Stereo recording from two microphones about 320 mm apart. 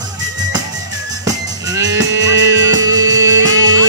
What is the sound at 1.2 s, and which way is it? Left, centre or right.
Music, centre.